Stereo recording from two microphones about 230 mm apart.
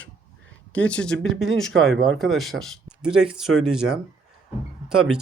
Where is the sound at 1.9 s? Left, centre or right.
Right.